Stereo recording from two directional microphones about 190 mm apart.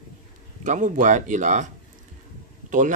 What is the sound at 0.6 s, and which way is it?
Speech, 40° right (ahead or behind).